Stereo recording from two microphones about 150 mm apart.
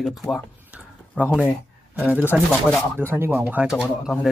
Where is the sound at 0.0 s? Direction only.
Centre (ahead or behind).